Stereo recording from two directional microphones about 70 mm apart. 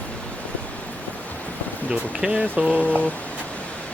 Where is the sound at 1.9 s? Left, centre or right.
Centre.